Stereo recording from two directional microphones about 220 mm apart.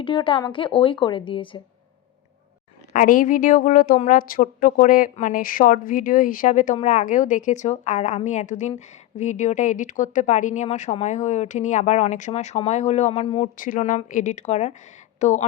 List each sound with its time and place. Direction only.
0.0 s speech: 25° left (ahead or behind)
2.9 s a woman's voice: 35° left (ahead or behind)